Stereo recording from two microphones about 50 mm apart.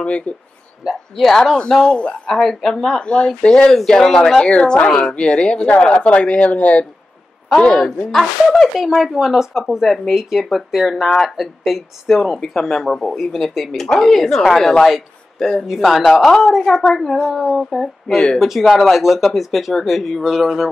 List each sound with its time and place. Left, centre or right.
0.8 s a woman's voice: centre
4.4 s speech: left
4.8 s a woman's voice: centre
5.1 s speech: left
8.5 s a woman's voice: centre
15.6 s a woman's voice: centre
17.3 s speech: centre
18.4 s speech: centre